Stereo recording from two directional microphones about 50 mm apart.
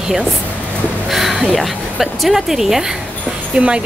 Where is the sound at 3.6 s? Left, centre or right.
Right.